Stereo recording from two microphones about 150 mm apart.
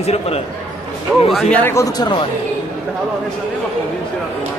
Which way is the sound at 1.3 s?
10° left (ahead or behind).